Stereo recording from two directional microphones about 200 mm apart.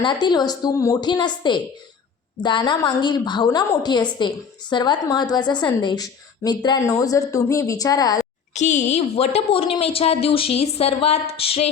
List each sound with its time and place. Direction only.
0.0 s a woman's voice: 20° left (ahead or behind)
8.5 s a woman's voice: 35° left (ahead or behind)